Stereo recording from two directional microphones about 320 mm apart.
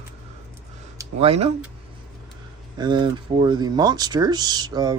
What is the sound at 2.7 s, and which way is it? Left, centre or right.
Speech, centre.